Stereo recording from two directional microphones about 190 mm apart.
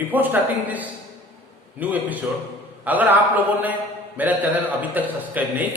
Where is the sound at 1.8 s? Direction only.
10° right (ahead or behind).